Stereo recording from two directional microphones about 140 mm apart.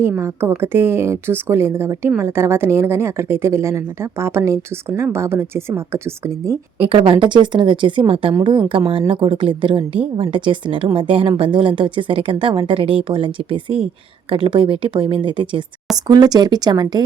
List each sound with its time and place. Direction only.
0.0 s a woman's voice: 15° right (ahead or behind)
6.7 s a woman's voice: 40° right (ahead or behind)